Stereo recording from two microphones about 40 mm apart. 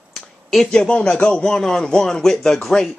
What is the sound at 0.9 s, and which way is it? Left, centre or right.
Speech, left.